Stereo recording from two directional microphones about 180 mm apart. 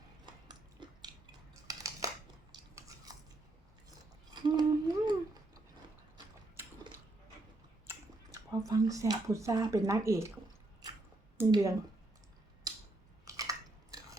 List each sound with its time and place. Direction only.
0.4 s a sound: 25° right (ahead or behind)
1.6 s scissors: 20° right (ahead or behind)
4.4 s humming: 25° right (ahead or behind)
7.9 s speech: 15° right (ahead or behind)
11.3 s speech: 15° right (ahead or behind)
12.7 s a sound: 20° right (ahead or behind)
13.2 s chewing: 20° right (ahead or behind)